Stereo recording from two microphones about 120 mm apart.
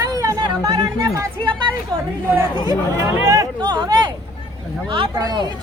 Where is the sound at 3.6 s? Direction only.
35° right (ahead or behind).